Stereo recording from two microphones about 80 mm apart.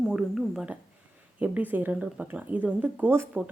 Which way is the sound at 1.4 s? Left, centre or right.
Right.